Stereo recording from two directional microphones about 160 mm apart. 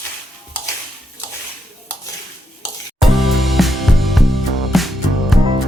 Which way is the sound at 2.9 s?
Centre (ahead or behind).